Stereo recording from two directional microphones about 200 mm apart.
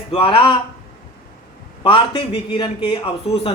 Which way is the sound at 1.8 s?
25° left (ahead or behind).